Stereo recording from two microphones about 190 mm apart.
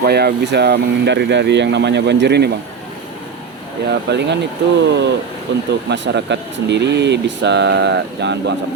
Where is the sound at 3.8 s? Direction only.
65° right (ahead or behind).